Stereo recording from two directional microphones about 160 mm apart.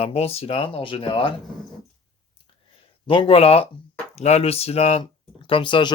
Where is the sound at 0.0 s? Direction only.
40° left (ahead or behind).